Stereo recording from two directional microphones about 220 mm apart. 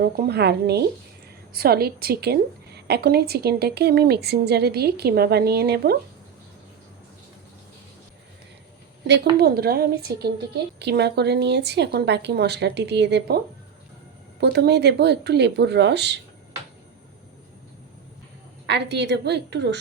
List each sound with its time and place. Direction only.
0.0 s a woman's voice: 45° right (ahead or behind)
9.4 s a woman's voice: 45° right (ahead or behind)
14.4 s a woman's voice: 50° right (ahead or behind)
18.6 s a woman's voice: 50° right (ahead or behind)